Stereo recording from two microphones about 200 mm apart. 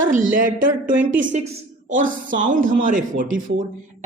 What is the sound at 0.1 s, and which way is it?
A man's voice, 40° right (ahead or behind).